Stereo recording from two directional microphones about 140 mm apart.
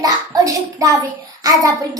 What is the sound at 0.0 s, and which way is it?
Child singing, 25° right (ahead or behind).